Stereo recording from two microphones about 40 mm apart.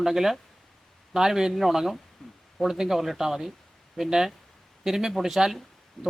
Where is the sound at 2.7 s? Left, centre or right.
Centre.